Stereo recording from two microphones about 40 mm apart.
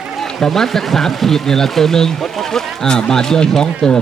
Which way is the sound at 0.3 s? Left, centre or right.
Centre.